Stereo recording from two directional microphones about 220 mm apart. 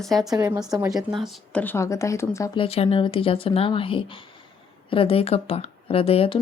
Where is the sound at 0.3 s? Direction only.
10° right (ahead or behind).